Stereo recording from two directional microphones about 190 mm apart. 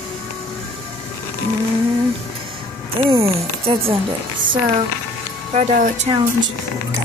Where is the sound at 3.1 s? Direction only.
30° right (ahead or behind).